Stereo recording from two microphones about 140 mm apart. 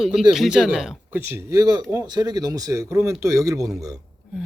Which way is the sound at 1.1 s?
15° right (ahead or behind).